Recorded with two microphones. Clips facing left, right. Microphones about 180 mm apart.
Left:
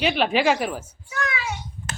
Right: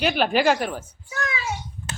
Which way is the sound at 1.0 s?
30° right (ahead or behind).